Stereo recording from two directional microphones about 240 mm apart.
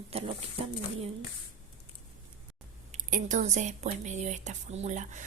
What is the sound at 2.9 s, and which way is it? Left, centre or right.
Speech, right.